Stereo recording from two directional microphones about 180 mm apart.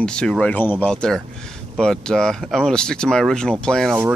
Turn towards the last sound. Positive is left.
turn(degrees=5)  # may be behind; listen again after turning